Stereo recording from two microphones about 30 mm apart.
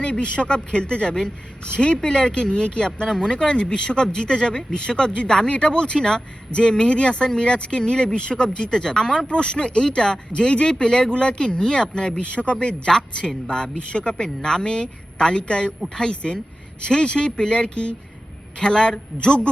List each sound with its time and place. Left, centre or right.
0.0 s speech: left
6.0 s speech: centre
6.6 s speech: left
8.8 s speech: left
9.2 s speech: left
12.2 s speech: left
13.0 s speech: left
16.8 s speech: left